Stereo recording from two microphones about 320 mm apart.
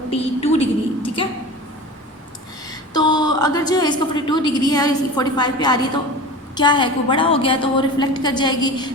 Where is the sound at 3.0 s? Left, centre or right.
Centre.